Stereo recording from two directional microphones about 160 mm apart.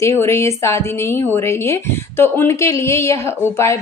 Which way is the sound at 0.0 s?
15° left (ahead or behind).